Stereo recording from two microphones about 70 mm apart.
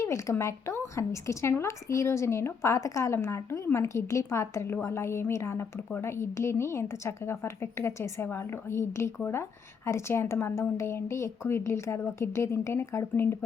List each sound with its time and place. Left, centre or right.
0.0 s a woman's voice: left